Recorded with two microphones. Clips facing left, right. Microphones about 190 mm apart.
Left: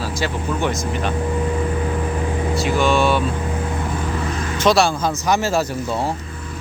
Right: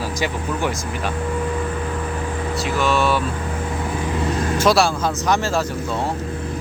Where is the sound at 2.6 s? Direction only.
Centre (ahead or behind).